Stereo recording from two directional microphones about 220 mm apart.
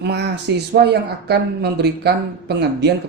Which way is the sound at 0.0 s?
50° right (ahead or behind).